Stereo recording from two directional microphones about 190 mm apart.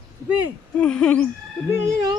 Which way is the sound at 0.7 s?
5° left (ahead or behind).